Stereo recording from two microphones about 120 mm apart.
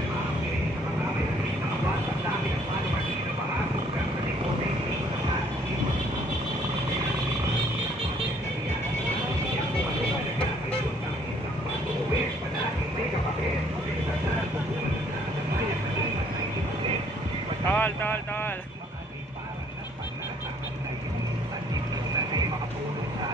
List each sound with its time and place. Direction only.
17.6 s vehicle: 15° left (ahead or behind)